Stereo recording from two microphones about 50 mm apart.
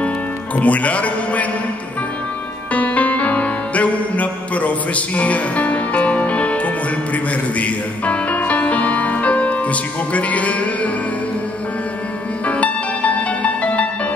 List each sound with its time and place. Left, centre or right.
0.6 s a man's voice: left
2.7 s music: left
12.4 s music: left